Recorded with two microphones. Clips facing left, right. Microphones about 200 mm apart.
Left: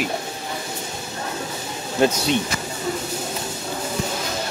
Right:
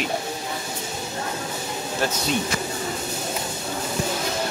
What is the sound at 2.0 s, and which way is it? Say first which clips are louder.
Speech: left 8 dB; 20° left (ahead or behind).